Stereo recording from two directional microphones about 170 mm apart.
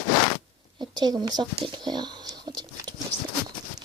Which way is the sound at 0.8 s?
25° right (ahead or behind).